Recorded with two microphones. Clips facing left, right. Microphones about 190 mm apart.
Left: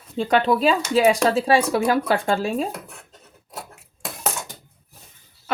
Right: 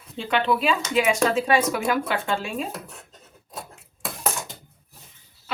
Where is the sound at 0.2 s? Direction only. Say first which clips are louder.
Left 4 dB; 40° left (ahead or behind).